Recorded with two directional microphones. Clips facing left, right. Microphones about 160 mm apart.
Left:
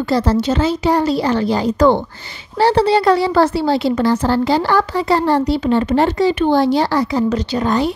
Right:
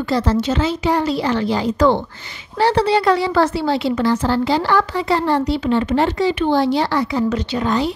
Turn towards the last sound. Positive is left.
turn(degrees=45)  # may be behind; listen again after turning